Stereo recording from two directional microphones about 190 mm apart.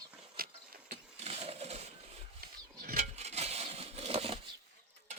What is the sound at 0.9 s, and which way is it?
Engine starting, 30° right (ahead or behind).